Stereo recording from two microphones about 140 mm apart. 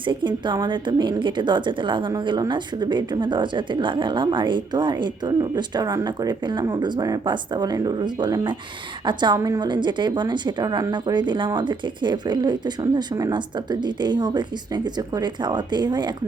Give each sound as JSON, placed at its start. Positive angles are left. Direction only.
{"t": 0.0, "sound": "a woman's voice", "side_deg": -35}